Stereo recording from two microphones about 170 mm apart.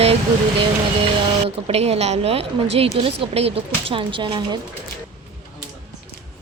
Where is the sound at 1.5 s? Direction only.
35° right (ahead or behind).